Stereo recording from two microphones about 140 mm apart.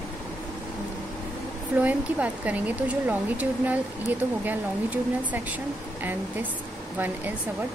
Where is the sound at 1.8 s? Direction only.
10° right (ahead or behind).